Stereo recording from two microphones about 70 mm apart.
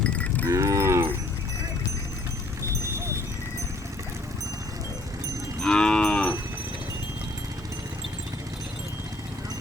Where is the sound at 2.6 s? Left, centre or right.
Right.